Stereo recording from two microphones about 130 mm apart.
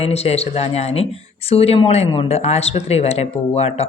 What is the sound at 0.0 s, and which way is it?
Speech, 50° left (ahead or behind).